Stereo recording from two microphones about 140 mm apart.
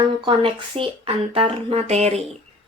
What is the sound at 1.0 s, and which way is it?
A woman's voice, 45° right (ahead or behind).